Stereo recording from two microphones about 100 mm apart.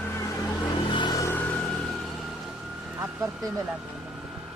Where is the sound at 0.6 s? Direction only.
50° left (ahead or behind).